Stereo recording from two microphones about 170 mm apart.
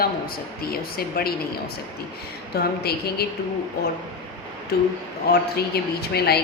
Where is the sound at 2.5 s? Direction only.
65° left (ahead or behind).